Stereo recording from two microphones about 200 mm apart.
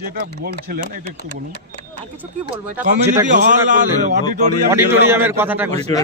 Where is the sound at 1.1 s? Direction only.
55° left (ahead or behind).